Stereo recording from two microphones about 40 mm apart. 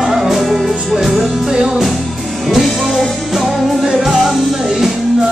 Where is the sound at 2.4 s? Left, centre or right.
Centre.